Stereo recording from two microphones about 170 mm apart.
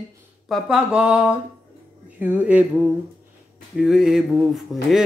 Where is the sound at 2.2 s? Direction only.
10° right (ahead or behind).